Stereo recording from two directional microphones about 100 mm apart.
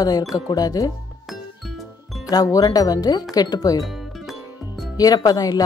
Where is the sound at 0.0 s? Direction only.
40° left (ahead or behind).